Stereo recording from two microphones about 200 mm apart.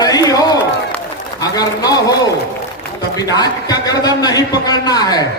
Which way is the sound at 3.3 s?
20° left (ahead or behind).